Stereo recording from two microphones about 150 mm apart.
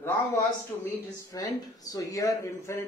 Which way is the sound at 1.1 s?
25° left (ahead or behind).